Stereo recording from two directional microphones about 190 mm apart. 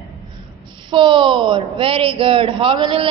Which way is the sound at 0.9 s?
25° right (ahead or behind).